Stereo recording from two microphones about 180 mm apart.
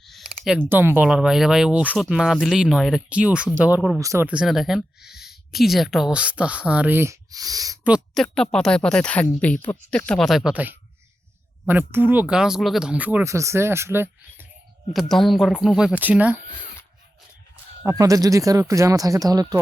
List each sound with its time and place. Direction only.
0.0 s speech: centre (ahead or behind); by 7.8 s 20° right (ahead or behind)
7.9 s a woman's voice: centre (ahead or behind)
14.9 s speech: centre (ahead or behind)
17.8 s speech: 20° right (ahead or behind)